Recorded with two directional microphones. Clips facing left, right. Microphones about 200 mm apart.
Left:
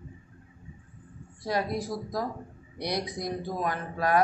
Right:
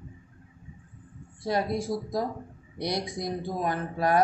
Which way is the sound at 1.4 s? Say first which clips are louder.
Right 2 dB; 25° right (ahead or behind).